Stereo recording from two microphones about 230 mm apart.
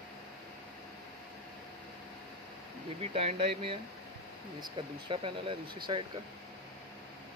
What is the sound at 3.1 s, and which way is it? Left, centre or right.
Speech, right.